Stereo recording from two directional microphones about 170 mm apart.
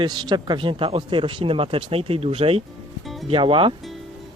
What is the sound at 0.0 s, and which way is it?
Speech, 25° right (ahead or behind).